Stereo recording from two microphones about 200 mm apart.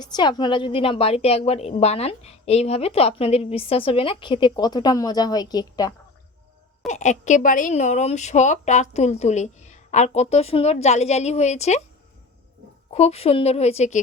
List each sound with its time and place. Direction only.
0.0 s a woman's voice: 20° left (ahead or behind)
6.8 s a woman's voice: 35° left (ahead or behind)
12.9 s a woman's voice: 30° left (ahead or behind)